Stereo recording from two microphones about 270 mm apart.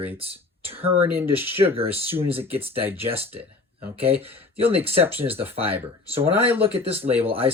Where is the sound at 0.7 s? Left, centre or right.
Right.